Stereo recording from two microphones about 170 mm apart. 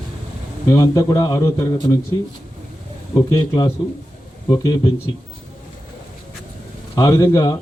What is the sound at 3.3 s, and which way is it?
Speech, 15° left (ahead or behind).